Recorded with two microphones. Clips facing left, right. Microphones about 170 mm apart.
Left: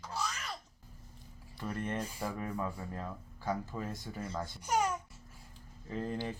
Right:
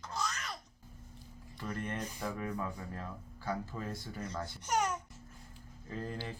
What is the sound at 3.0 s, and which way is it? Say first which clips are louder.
Speech: left 2 dB; 15° left (ahead or behind).